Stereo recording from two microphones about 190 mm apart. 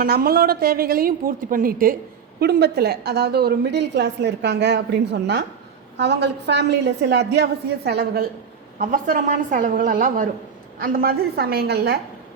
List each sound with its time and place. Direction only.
0.0 s a woman's voice: 55° right (ahead or behind)
2.4 s a woman's voice: 60° right (ahead or behind)
8.8 s a woman's voice: 45° right (ahead or behind)